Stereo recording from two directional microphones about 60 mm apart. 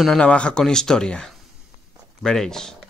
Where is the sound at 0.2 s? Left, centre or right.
Centre.